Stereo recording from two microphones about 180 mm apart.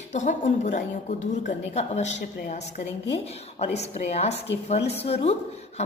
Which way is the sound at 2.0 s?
75° left (ahead or behind).